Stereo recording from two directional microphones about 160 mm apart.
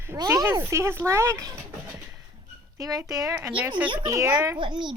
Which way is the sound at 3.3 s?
10° right (ahead or behind).